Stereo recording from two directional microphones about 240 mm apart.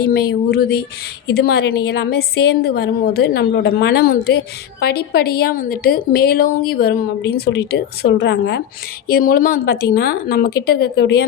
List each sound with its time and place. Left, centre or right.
0.0 s a woman's voice: left